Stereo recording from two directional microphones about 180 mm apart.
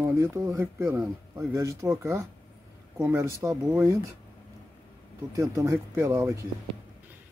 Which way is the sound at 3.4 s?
15° right (ahead or behind).